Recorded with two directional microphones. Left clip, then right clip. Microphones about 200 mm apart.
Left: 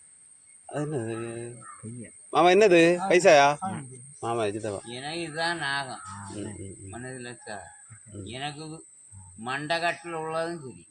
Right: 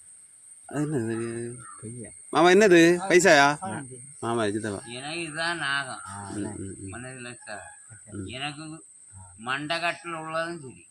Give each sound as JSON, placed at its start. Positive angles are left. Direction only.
{"t": 0.7, "sound": "speech", "side_deg": -50}
{"t": 4.9, "sound": "speech", "side_deg": -10}